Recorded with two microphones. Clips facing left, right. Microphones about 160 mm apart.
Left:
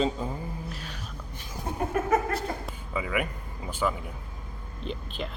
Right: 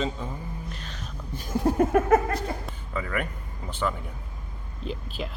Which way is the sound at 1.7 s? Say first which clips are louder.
Right 12 dB; 65° right (ahead or behind).